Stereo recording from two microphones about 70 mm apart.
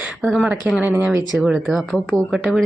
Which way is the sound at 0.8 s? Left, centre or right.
Right.